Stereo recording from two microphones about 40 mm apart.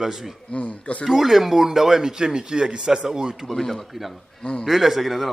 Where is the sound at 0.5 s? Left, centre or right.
Left.